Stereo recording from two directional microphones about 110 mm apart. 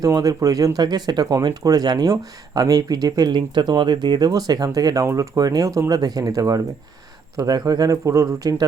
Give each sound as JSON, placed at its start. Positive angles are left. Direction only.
{"t": 0.0, "sound": "speech", "side_deg": -35}